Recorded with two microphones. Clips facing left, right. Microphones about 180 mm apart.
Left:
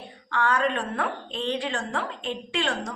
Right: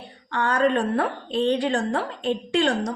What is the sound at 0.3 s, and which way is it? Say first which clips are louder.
A woman's voice: right 3 dB; 35° right (ahead or behind).